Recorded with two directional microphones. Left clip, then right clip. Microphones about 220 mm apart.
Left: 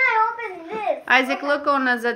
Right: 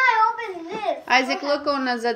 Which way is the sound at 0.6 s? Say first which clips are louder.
Left 3 dB; 15° left (ahead or behind).